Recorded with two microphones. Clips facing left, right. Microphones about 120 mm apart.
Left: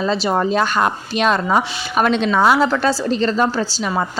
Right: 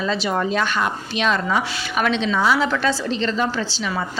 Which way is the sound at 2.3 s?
55° left (ahead or behind).